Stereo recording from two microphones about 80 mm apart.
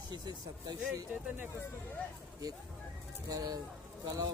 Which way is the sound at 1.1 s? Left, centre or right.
Centre.